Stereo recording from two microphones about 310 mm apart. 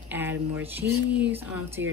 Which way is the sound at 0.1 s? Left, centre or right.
Centre.